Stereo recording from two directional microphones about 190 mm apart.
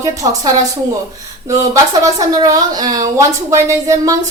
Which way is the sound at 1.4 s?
15° right (ahead or behind).